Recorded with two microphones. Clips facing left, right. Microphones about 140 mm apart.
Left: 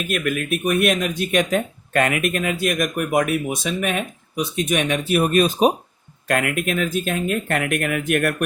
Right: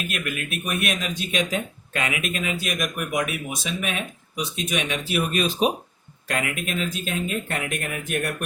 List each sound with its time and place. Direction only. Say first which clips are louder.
0.1 s speech: left 8 dB; 50° left (ahead or behind)
6.2 s speech: left 6 dB; 55° left (ahead or behind)